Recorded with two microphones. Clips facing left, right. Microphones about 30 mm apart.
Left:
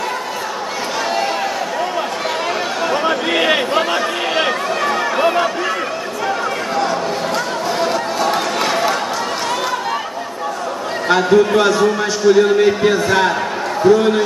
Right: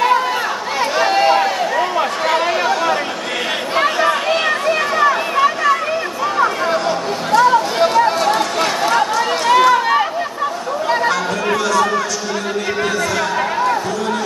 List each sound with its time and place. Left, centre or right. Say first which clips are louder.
1.1 s a sound: right 6 dB; centre
3.7 s chatter: right 1 dB; right
4.4 s run: right 1 dB; centre
7.4 s a sound: right 5 dB; centre
8.3 s run: right 1 dB; centre
9.5 s run: right 8 dB; right
11.2 s speech: left 6 dB; centre
12.3 s a man's voice: left 11 dB; centre
12.9 s speech: left 3 dB; left